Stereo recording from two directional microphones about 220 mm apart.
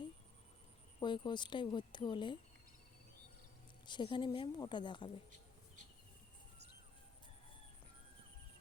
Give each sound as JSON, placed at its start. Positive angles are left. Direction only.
{"t": 0.9, "sound": "speech", "side_deg": 20}
{"t": 3.8, "sound": "speech", "side_deg": 20}